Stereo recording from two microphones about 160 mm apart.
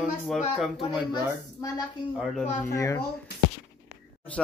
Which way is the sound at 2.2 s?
Centre (ahead or behind).